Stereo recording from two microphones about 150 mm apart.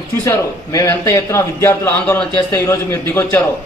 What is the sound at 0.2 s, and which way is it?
A man's voice, 25° left (ahead or behind).